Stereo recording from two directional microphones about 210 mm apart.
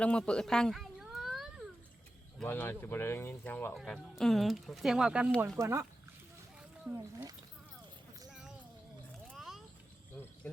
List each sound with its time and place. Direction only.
0.0 s a sound: 5° left (ahead or behind)
2.4 s speech: 10° left (ahead or behind); by 5.8 s 15° right (ahead or behind)
6.9 s speech: 15° right (ahead or behind)
8.3 s a sound: centre (ahead or behind)
9.3 s vehicle: centre (ahead or behind)
10.4 s speech: 10° left (ahead or behind)